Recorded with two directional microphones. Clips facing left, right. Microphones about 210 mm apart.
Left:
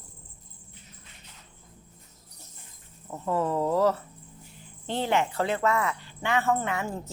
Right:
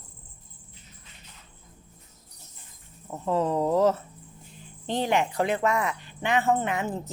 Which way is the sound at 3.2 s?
20° right (ahead or behind).